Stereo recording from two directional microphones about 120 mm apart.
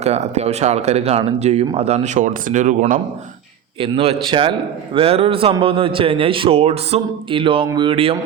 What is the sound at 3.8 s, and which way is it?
A man's voice, 50° right (ahead or behind).